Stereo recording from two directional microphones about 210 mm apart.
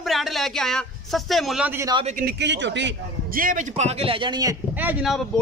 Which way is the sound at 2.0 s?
45° right (ahead or behind).